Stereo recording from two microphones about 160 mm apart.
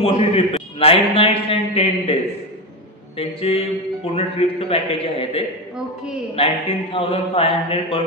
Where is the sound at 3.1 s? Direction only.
35° left (ahead or behind).